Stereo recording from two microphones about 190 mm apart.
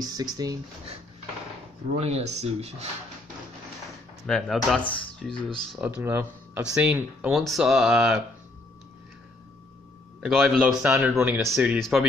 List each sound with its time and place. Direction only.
0.0 s speech: 20° right (ahead or behind)
2.0 s speech: 35° right (ahead or behind)
4.3 s speech: centre (ahead or behind)
10.2 s speech: centre (ahead or behind)